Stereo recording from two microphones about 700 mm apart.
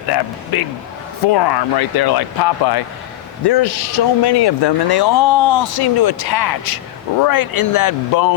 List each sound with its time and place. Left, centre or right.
1.3 s speech: left